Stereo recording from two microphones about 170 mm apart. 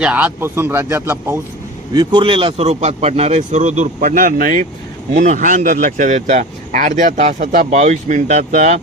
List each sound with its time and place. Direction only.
0.0 s a man's voice: 10° right (ahead or behind)
1.9 s a man's voice: 25° right (ahead or behind); by 8.8 s 45° right (ahead or behind)